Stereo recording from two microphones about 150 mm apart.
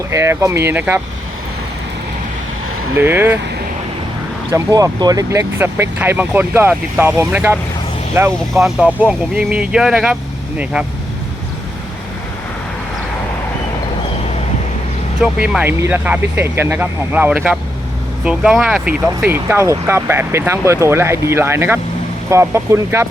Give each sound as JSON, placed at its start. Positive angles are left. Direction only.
{"t": 0.1, "sound": "speech", "side_deg": -20}
{"t": 3.0, "sound": "speech", "side_deg": -15}
{"t": 4.5, "sound": "speech", "side_deg": -25}
{"t": 15.2, "sound": "speech", "side_deg": -5}
{"t": 19.0, "sound": "speech", "side_deg": -15}